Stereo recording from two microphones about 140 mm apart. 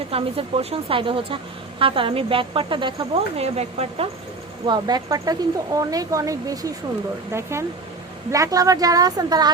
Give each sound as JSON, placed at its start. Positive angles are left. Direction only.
{"t": 0.1, "sound": "speech", "side_deg": -40}
{"t": 3.4, "sound": "speech", "side_deg": -50}
{"t": 4.6, "sound": "speech", "side_deg": -30}
{"t": 8.3, "sound": "speech", "side_deg": -25}